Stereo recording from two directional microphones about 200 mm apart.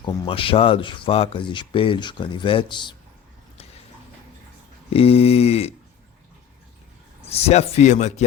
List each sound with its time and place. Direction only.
0.0 s speech: 25° left (ahead or behind)
4.9 s a man's voice: 30° left (ahead or behind)
7.3 s a man's voice: 30° left (ahead or behind)